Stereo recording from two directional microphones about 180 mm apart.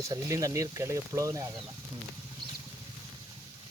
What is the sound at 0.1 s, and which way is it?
Speech, 20° right (ahead or behind).